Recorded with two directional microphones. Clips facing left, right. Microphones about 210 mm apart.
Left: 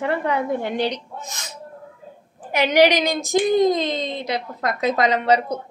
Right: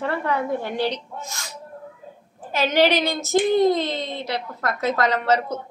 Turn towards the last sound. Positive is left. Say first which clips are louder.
# left 2 dB
turn(degrees=15)  # may be behind; listen again after turning